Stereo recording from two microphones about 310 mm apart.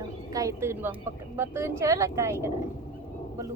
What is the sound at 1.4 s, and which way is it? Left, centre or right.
Speech, centre.